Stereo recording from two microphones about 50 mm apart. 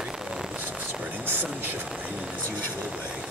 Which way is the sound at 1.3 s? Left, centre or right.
Right.